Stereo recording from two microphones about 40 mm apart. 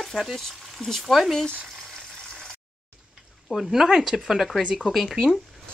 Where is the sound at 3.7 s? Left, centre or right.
Centre.